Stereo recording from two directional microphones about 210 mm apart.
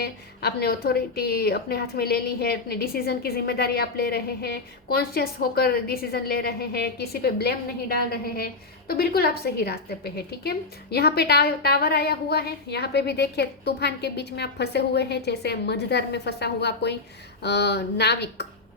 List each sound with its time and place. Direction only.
0.0 s a woman's voice: 50° left (ahead or behind)